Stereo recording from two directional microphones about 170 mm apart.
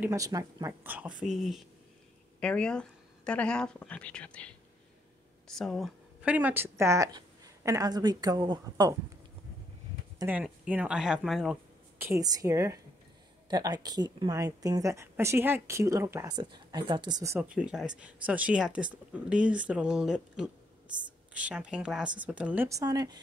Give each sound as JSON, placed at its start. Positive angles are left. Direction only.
{"t": 0.0, "sound": "speech", "side_deg": -20}
{"t": 0.8, "sound": "speech", "side_deg": -10}
{"t": 6.2, "sound": "speech", "side_deg": -10}
{"t": 10.2, "sound": "speech", "side_deg": -5}
{"t": 12.0, "sound": "speech", "side_deg": -20}
{"t": 17.6, "sound": "speech", "side_deg": -5}
{"t": 22.7, "sound": "speech", "side_deg": -20}